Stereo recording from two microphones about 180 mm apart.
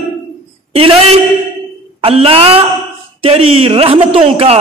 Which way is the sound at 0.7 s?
30° right (ahead or behind).